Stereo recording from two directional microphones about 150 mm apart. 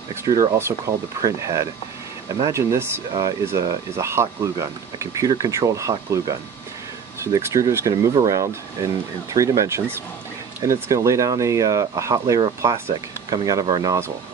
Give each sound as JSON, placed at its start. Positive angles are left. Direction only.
{"t": 0.1, "sound": "speech", "side_deg": -20}
{"t": 7.3, "sound": "speech", "side_deg": -25}